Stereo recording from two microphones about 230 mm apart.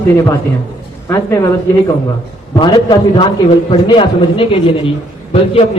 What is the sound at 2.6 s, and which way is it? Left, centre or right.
A man's voice, centre.